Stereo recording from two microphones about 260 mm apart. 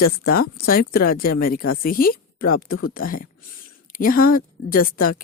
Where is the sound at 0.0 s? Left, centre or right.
Left.